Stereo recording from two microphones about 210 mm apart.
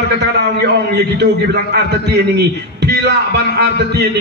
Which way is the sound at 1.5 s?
50° right (ahead or behind).